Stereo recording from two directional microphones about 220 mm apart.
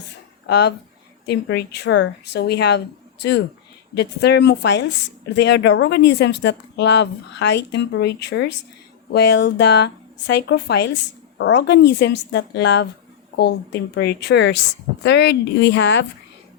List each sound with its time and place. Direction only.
0.4 s speech: 50° left (ahead or behind)